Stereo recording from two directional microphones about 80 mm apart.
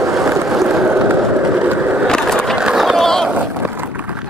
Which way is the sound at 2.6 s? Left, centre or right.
Centre.